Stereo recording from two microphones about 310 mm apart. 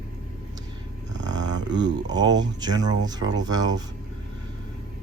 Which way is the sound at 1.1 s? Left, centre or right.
Right.